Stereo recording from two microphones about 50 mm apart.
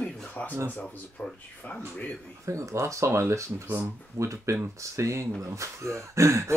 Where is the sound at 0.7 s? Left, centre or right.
Left.